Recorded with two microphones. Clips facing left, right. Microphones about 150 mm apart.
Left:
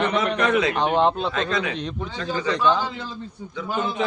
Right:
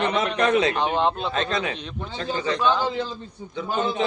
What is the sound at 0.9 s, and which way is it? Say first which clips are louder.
Speech: left 3 dB; centre (ahead or behind).